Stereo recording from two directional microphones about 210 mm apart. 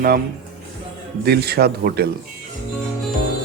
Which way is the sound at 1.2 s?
50° right (ahead or behind).